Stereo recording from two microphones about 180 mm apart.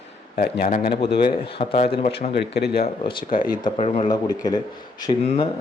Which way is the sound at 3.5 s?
30° left (ahead or behind).